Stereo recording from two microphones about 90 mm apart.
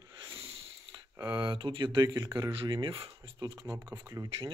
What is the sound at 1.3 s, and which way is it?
Speech, 60° right (ahead or behind).